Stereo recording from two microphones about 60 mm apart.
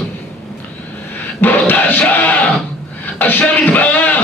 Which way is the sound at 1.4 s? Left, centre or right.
Left.